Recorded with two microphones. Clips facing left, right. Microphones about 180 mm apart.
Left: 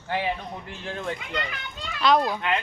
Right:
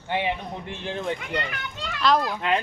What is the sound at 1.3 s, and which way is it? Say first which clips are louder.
Speech: right 2 dB; 60° right (ahead or behind).